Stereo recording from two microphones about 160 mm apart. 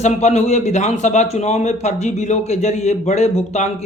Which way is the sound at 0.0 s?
45° left (ahead or behind).